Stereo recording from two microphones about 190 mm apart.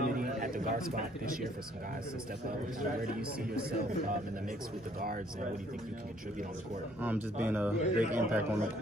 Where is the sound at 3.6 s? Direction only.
50° right (ahead or behind).